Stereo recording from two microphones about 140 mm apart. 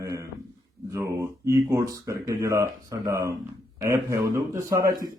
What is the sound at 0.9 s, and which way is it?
A man's voice, 20° right (ahead or behind).